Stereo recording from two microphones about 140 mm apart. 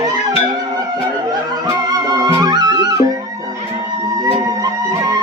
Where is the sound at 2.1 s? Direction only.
25° right (ahead or behind).